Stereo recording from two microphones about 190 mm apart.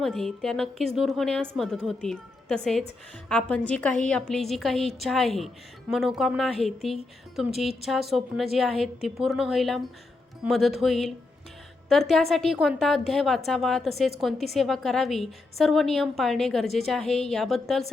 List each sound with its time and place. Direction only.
0.0 s a woman's voice: centre (ahead or behind)